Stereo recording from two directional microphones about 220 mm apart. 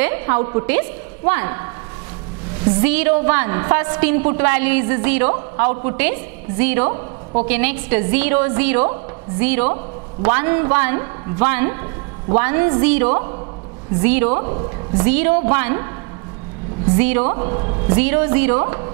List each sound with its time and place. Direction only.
0.0 s a woman's voice: 10° right (ahead or behind)
2.8 s a woman's voice: 10° right (ahead or behind)
14.4 s a woman's voice: 25° right (ahead or behind)
15.0 s a woman's voice: 10° right (ahead or behind)
16.9 s a woman's voice: 10° right (ahead or behind)
17.3 s a woman's voice: 25° right (ahead or behind)